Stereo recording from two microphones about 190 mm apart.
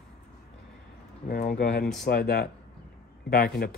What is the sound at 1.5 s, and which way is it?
Speech, 55° left (ahead or behind).